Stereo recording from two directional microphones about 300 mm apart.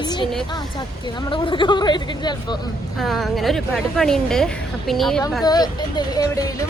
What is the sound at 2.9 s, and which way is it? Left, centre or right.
A woman's voice, centre.